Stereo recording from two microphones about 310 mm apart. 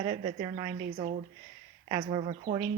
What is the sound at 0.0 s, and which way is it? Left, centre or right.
Speech, centre.